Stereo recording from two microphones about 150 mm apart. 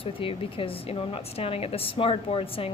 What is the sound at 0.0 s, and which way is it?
Speech, 35° left (ahead or behind).